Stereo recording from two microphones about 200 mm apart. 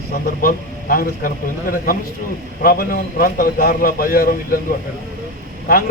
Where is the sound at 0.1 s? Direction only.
45° left (ahead or behind).